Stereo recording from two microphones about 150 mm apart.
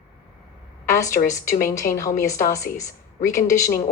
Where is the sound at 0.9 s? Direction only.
20° left (ahead or behind).